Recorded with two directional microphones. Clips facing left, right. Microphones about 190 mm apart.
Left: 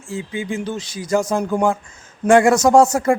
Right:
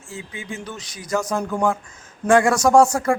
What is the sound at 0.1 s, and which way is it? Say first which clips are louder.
Speech: left 8 dB; 30° left (ahead or behind).